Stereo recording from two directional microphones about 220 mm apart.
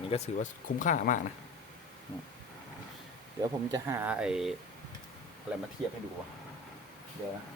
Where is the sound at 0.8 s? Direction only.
35° left (ahead or behind).